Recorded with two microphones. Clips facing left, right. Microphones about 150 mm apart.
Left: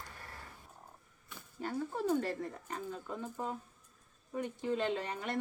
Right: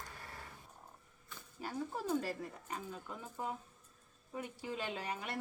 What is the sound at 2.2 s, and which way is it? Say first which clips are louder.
Speech: left 4 dB; 10° right (ahead or behind).